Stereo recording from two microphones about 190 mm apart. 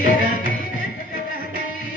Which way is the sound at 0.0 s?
50° left (ahead or behind).